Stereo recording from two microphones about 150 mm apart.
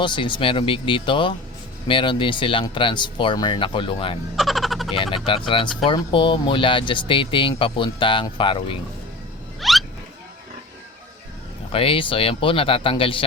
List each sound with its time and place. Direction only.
0.0 s speech: 30° left (ahead or behind)
4.4 s a sound: centre (ahead or behind)
5.1 s speech: 35° left (ahead or behind)
9.6 s rodents: centre (ahead or behind)
11.7 s speech: 40° left (ahead or behind)